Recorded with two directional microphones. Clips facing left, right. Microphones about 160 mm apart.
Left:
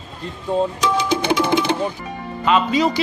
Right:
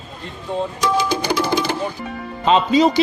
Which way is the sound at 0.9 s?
20° left (ahead or behind).